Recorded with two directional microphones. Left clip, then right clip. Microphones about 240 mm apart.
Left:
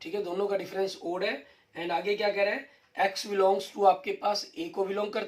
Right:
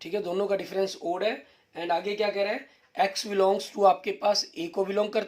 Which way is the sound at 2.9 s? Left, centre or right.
Right.